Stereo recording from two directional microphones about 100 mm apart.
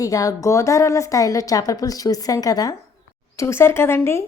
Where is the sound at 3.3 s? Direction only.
25° left (ahead or behind).